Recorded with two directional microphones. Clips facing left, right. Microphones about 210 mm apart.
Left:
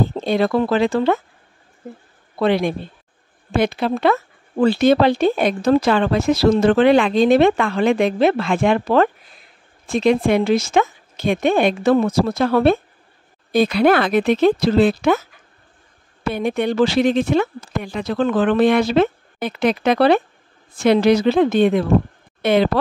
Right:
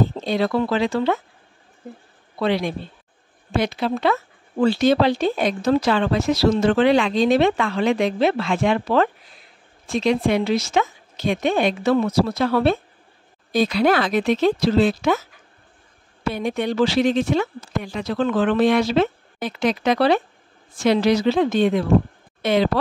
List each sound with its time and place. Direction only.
0.2 s speech: 55° left (ahead or behind)
2.3 s speech: 55° left (ahead or behind)
16.3 s speech: 55° left (ahead or behind)